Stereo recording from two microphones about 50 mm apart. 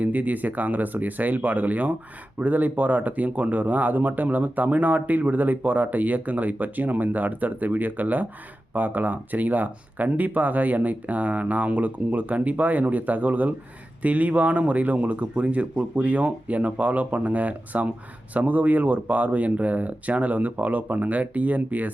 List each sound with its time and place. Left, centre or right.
0.0 s speech: right